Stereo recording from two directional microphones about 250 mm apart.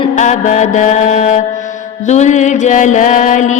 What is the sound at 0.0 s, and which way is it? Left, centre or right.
Mantra, left.